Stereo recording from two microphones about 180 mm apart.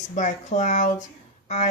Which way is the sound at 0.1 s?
45° left (ahead or behind).